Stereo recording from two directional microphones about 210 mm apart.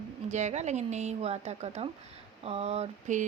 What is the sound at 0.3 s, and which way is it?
Speech, 35° right (ahead or behind).